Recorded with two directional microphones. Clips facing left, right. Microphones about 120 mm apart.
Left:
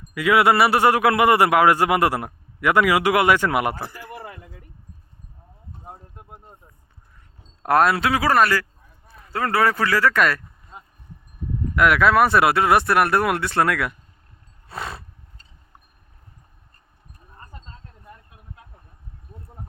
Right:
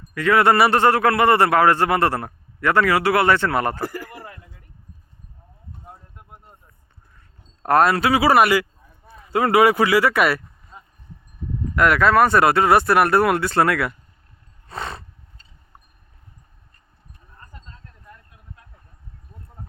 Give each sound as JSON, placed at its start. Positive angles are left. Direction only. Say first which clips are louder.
{"t": 0.1, "sound": "speech", "louder": "right 1 dB", "side_deg": 10}
{"t": 0.8, "sound": "a man's voice", "louder": "even", "side_deg": 10}
{"t": 7.6, "sound": "speech", "louder": "right 1 dB", "side_deg": 0}
{"t": 11.8, "sound": "speech", "louder": "right 1 dB", "side_deg": 0}
{"t": 14.7, "sound": "roar", "louder": "right 1 dB", "side_deg": 5}
{"t": 17.5, "sound": "a sound", "louder": "left 2 dB", "side_deg": 25}